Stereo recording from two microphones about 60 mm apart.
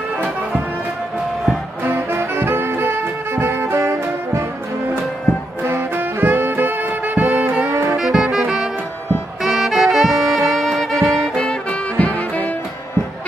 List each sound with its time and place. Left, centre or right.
1.9 s music: right
5.6 s music: right
7.9 s music: centre
9.4 s saxophone: centre
12.0 s music: left